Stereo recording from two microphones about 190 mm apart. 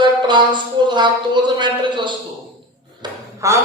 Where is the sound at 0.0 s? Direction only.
25° right (ahead or behind).